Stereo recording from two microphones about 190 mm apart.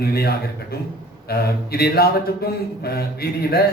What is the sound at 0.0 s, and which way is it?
A man's voice, 55° left (ahead or behind).